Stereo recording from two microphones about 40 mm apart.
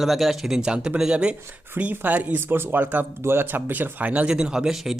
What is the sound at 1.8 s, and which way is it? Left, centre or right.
Speech, right.